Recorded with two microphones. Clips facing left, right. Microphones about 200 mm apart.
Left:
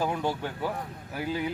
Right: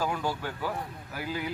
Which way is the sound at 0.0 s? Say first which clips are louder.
Left 2 dB; 25° left (ahead or behind).